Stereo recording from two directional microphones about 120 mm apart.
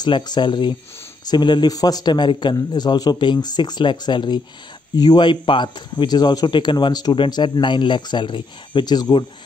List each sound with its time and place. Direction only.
0.0 s speech: 40° left (ahead or behind)